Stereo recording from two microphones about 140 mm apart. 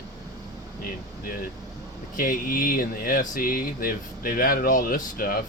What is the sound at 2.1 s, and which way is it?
Speech, 80° left.